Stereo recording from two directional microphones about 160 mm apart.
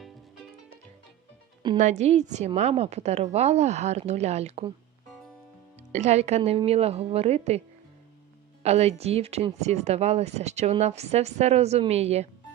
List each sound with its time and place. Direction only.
1.8 s speech: 45° right (ahead or behind)
5.9 s speech: 45° right (ahead or behind)
8.6 s speech: 40° right (ahead or behind)